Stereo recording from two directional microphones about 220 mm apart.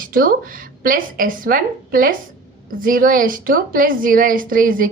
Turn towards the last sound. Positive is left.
turn(degrees=-40)  # may be behind; listen again after turning